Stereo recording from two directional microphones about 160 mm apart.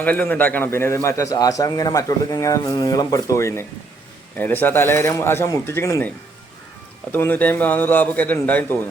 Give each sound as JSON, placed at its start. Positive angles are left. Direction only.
{"t": 0.0, "sound": "a man's voice", "side_deg": 10}
{"t": 7.1, "sound": "speech", "side_deg": 10}